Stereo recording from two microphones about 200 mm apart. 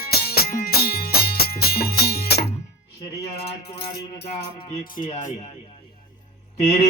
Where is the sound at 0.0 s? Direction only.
50° left (ahead or behind).